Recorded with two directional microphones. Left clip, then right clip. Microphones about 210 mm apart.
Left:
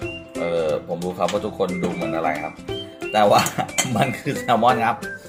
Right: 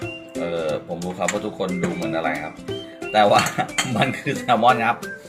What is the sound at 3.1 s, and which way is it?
Cutlery, 20° left (ahead or behind).